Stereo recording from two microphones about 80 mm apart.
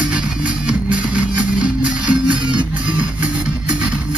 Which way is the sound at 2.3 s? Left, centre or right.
Right.